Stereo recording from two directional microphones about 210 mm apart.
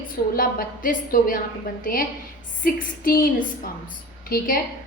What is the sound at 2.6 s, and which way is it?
Speech, 40° left (ahead or behind).